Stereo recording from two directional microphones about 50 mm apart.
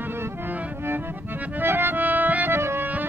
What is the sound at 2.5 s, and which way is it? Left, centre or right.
Music, right.